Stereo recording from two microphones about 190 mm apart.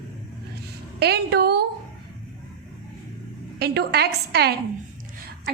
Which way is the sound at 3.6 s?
60° right (ahead or behind).